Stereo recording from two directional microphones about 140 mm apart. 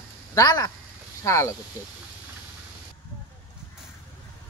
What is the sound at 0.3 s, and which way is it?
Speech, 25° left (ahead or behind).